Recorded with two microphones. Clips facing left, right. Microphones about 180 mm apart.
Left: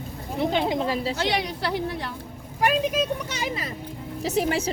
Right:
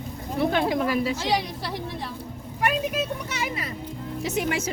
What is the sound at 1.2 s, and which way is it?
Speech, 70° left (ahead or behind).